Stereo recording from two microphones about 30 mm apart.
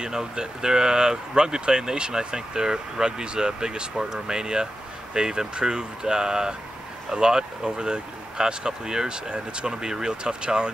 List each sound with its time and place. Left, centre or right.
0.0 s speech: right
3.9 s speech: centre